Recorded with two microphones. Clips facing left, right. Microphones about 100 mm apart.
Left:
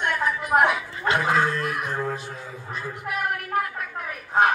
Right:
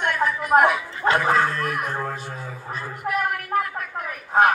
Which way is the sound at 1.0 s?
40° right (ahead or behind).